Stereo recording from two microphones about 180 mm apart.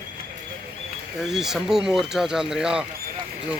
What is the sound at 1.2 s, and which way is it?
Speech, centre (ahead or behind).